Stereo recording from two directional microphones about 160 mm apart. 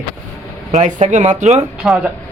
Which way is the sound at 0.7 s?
50° right (ahead or behind).